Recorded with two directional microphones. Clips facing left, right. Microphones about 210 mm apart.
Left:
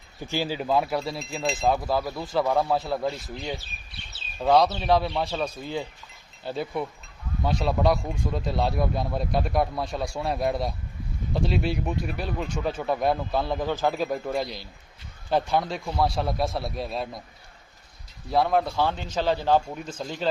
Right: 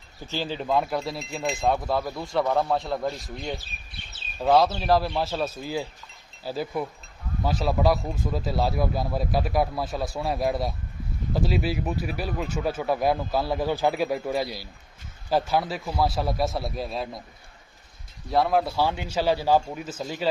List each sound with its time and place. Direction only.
0.3 s speech: 10° left (ahead or behind)
18.3 s a man's voice: centre (ahead or behind)